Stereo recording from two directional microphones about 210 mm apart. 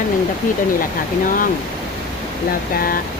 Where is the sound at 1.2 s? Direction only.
40° left (ahead or behind).